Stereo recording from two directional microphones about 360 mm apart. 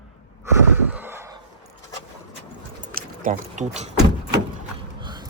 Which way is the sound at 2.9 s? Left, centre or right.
Right.